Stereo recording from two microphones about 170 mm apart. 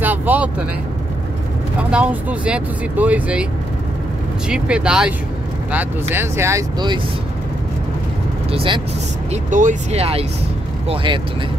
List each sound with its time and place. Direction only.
0.0 s vehicle: 10° right (ahead or behind)
1.9 s speech: 5° right (ahead or behind)
4.5 s speech: 5° right (ahead or behind); by 7.0 s 20° right (ahead or behind)
8.5 s speech: 30° right (ahead or behind)
9.3 s speech: 50° right (ahead or behind)